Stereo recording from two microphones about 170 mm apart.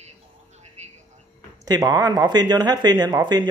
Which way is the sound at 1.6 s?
20° right (ahead or behind).